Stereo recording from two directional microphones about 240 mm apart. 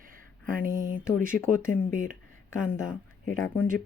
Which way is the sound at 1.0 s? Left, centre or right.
Centre.